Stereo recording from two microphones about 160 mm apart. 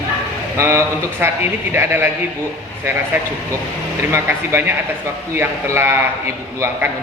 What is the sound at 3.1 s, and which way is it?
A man's voice, 15° right (ahead or behind).